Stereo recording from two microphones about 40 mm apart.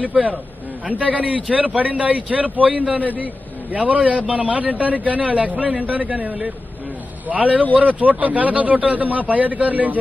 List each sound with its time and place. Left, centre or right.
0.0 s speech: right